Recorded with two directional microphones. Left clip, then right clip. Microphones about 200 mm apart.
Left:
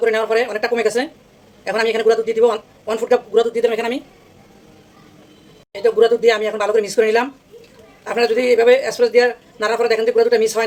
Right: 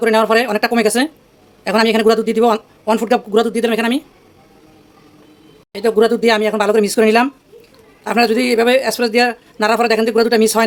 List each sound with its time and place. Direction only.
0.0 s a man's voice: 55° right (ahead or behind)
5.7 s a man's voice: 55° right (ahead or behind)